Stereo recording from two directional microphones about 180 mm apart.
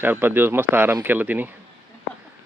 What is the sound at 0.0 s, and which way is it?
Speech, 10° right (ahead or behind).